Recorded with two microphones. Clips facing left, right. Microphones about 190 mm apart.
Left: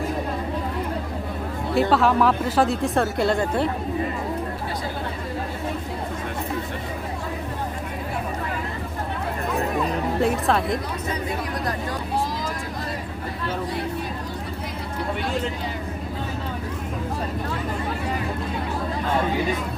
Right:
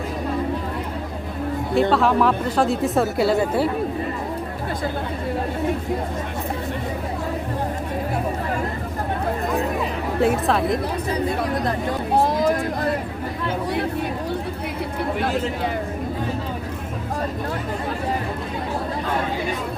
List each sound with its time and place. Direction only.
1.7 s speech: centre (ahead or behind)
10.2 s speech: centre (ahead or behind)
12.1 s vehicle: 60° right (ahead or behind)